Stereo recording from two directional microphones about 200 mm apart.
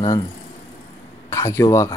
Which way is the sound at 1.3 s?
15° left (ahead or behind).